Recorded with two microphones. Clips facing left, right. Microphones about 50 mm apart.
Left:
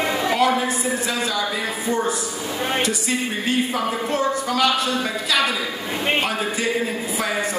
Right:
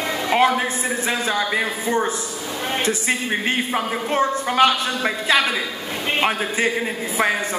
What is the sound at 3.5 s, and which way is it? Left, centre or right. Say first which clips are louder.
A woman's voice: left 2 dB; right.